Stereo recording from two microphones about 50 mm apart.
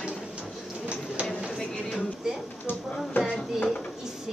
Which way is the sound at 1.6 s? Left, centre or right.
Centre.